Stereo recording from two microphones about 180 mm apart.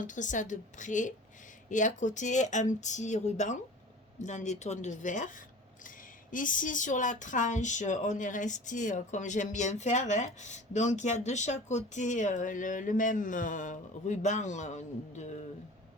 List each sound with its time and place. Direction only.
0.0 s speech: 45° left (ahead or behind)